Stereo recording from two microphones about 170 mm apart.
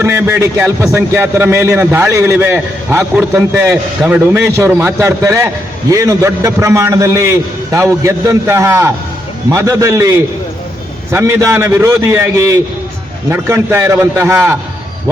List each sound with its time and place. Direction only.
0.0 s a man's voice: 15° right (ahead or behind)